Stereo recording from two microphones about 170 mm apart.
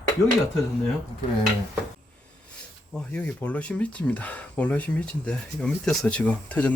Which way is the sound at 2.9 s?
10° left (ahead or behind).